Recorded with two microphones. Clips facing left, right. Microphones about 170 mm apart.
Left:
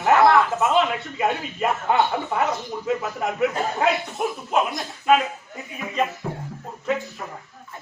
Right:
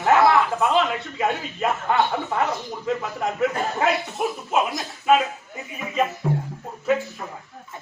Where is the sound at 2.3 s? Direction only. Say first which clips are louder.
Left 1 dB; 5° left (ahead or behind).